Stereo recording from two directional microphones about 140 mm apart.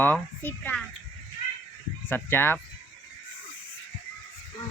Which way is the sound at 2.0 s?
15° left (ahead or behind).